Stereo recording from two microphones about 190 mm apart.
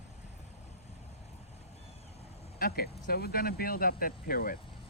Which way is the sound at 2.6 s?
55° left (ahead or behind).